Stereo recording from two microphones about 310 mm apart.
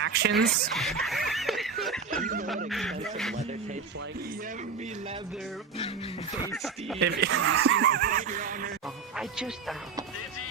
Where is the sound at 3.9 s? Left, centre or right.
Right.